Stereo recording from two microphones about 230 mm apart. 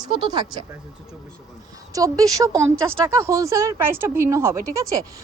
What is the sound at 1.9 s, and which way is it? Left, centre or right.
Speech, centre.